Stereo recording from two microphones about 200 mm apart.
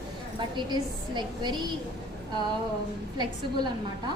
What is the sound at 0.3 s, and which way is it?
A woman's voice, 25° right (ahead or behind).